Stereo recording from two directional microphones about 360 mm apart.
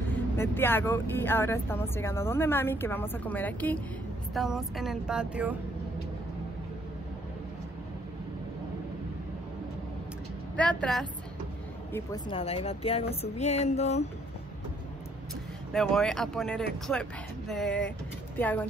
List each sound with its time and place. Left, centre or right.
0.1 s speech: centre
10.5 s a woman's voice: centre
15.7 s speech: centre